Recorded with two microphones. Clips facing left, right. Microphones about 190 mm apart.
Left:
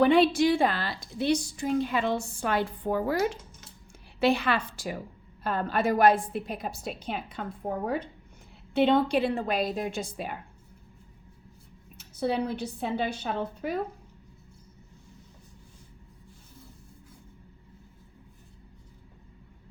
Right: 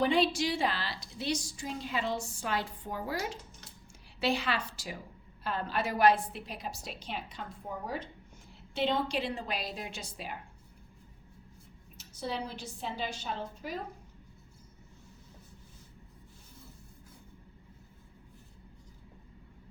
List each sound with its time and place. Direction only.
0.0 s a woman's voice: 60° left (ahead or behind)
11.9 s a woman's voice: 55° left (ahead or behind)